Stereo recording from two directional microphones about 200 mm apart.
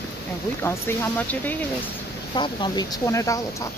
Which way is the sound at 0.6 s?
10° left (ahead or behind).